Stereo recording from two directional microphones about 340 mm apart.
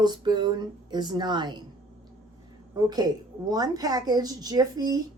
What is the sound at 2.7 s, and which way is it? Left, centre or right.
Speech, centre.